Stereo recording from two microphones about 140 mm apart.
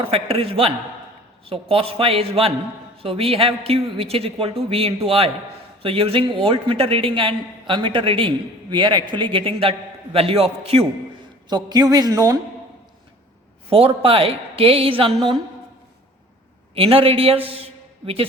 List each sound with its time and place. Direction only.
0.0 s a woman's voice: 40° right (ahead or behind)
11.4 s a woman's voice: 30° right (ahead or behind)
13.7 s a man's voice: 40° right (ahead or behind)
16.7 s a man's voice: 40° right (ahead or behind)